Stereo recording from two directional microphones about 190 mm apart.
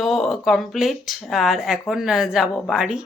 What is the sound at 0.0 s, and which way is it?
Speech, centre (ahead or behind).